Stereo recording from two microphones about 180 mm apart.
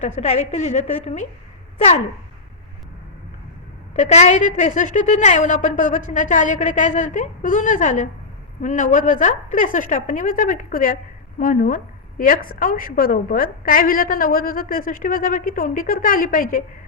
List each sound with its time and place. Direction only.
0.0 s a woman's voice: 40° left (ahead or behind)
3.9 s a woman's voice: 40° left (ahead or behind)